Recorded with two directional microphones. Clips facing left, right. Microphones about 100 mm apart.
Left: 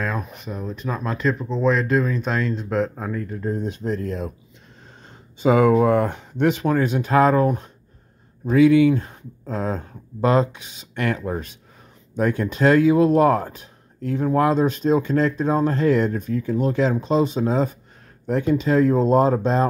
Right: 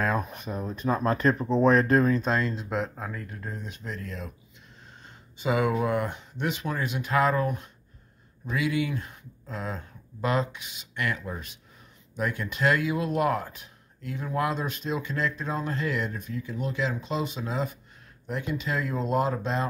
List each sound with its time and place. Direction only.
0.0 s speech: 35° right (ahead or behind)
1.6 s speech: 45° right (ahead or behind)
2.5 s speech: 5° right (ahead or behind)
3.4 s speech: 25° left (ahead or behind)
5.4 s speech: 40° left (ahead or behind)